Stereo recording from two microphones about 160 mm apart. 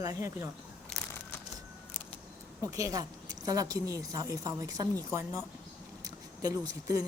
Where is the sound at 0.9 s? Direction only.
Centre (ahead or behind).